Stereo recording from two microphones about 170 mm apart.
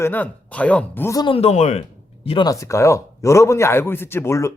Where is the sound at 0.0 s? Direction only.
10° left (ahead or behind); by 1.8 s 40° left (ahead or behind).